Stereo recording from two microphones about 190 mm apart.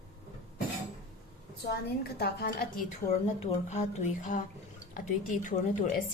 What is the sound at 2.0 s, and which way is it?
Speech, 55° left (ahead or behind).